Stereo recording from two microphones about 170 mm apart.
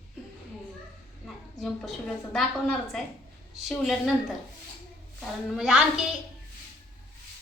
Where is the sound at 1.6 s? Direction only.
5° left (ahead or behind).